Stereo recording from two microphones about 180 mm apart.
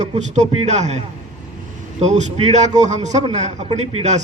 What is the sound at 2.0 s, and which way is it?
A man's voice, 40° right (ahead or behind).